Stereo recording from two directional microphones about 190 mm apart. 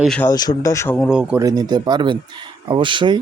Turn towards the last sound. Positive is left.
turn(degrees=-25)  # may be behind; listen again after turning